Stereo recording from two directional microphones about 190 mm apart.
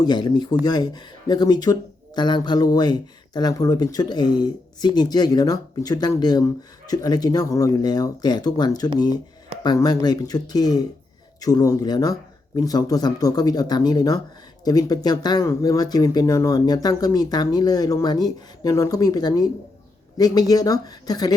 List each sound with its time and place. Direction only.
0.0 s speech: 20° left (ahead or behind)